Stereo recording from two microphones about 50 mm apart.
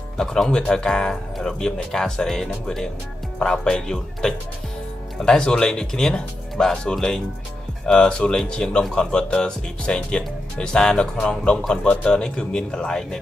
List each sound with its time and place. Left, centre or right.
0.2 s speech: centre